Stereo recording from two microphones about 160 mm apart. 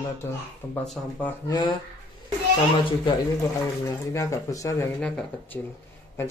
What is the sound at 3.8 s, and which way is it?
Speech, 20° left (ahead or behind).